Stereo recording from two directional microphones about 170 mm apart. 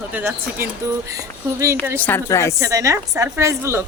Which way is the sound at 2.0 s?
15° left (ahead or behind).